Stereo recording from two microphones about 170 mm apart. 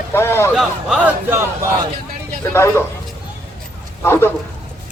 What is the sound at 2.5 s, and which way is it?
Speech, 15° left (ahead or behind).